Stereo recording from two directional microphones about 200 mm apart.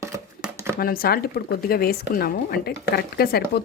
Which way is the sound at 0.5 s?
15° right (ahead or behind).